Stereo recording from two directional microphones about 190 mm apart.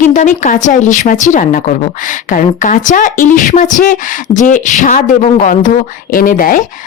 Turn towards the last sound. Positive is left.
turn(degrees=45)  # may be behind; listen again after turning